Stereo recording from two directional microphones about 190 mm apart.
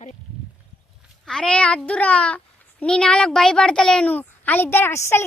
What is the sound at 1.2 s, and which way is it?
A child's voice, 5° left (ahead or behind).